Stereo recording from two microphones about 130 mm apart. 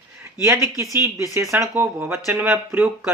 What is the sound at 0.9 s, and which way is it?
Speech, 20° right (ahead or behind).